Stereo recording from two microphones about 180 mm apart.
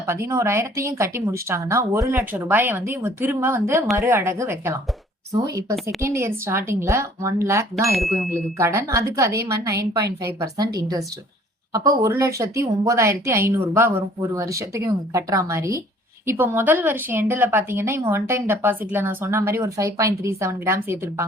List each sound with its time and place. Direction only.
0.1 s a woman's voice: 15° right (ahead or behind)
7.9 s speech: centre (ahead or behind)
8.5 s a woman's voice: 15° right (ahead or behind)